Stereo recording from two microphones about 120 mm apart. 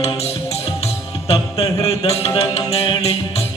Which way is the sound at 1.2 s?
55° left (ahead or behind).